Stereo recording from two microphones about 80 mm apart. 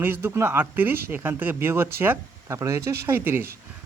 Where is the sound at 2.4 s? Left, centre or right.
Right.